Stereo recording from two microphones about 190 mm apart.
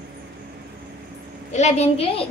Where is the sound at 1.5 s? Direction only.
35° left (ahead or behind).